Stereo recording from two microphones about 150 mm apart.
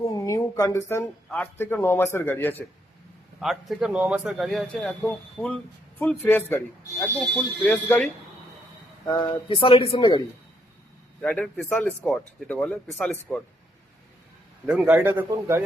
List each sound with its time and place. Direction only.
0.0 s speech: 20° left (ahead or behind)
3.4 s a man's voice: centre (ahead or behind); by 8.0 s 15° left (ahead or behind)
9.0 s speech: 30° left (ahead or behind)
11.2 s speech: 5° left (ahead or behind)
14.7 s a man's voice: 5° right (ahead or behind)